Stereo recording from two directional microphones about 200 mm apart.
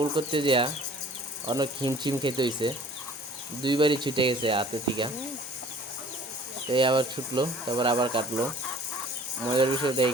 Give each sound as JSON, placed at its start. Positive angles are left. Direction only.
{"t": 0.0, "sound": "speech", "side_deg": -25}
{"t": 6.7, "sound": "speech", "side_deg": -25}
{"t": 9.5, "sound": "speech", "side_deg": -25}